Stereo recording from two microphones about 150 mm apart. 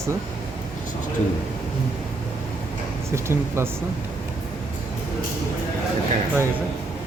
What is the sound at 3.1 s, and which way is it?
Speech, 15° right (ahead or behind).